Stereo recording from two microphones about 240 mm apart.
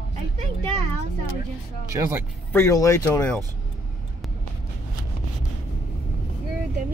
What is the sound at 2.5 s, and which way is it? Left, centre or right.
Speech, centre.